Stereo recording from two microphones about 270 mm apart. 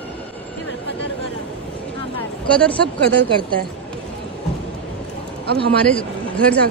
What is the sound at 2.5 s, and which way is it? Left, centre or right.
Speech, centre.